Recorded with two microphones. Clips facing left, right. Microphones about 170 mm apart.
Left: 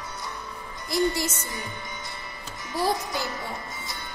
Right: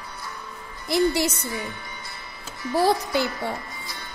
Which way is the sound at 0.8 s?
65° right (ahead or behind).